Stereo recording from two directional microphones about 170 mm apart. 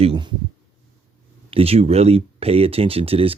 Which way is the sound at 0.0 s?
30° right (ahead or behind).